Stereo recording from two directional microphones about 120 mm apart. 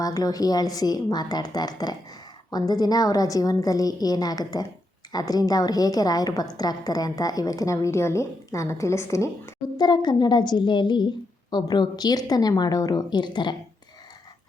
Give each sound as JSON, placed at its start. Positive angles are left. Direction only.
{"t": 0.0, "sound": "a woman's voice", "side_deg": 30}
{"t": 9.7, "sound": "a woman's voice", "side_deg": 35}